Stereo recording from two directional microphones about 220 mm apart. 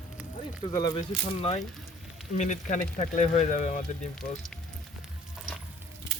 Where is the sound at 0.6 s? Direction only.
20° left (ahead or behind).